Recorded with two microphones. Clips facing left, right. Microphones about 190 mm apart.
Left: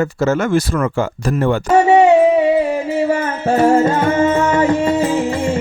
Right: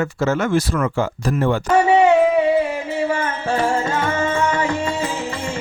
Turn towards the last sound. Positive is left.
turn(degrees=40)  # may be behind; listen again after turning